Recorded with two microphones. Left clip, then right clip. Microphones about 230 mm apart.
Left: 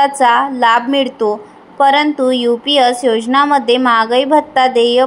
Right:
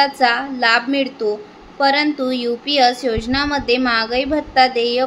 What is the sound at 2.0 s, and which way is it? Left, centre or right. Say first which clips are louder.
A woman's voice: left 6 dB; centre.